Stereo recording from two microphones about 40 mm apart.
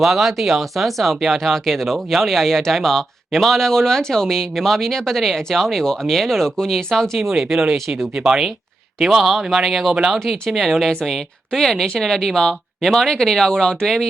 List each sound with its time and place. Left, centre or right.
0.0 s speech: centre
7.2 s speech: centre
9.0 s speech: centre